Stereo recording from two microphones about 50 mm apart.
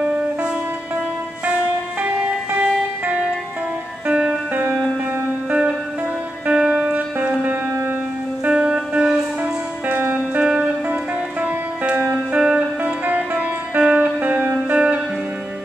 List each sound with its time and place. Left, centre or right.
0.0 s music: right
2.0 s music: right
4.1 s music: centre
5.5 s music: right
6.8 s music: right
8.6 s music: centre
9.4 s music: right
10.4 s music: right
12.8 s music: right
14.5 s music: right